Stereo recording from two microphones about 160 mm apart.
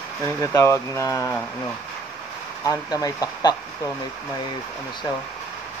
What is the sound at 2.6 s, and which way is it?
Speech, 20° left (ahead or behind).